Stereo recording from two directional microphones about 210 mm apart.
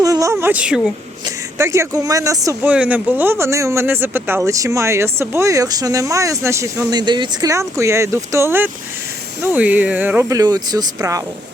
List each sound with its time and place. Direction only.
0.0 s speech: 15° right (ahead or behind)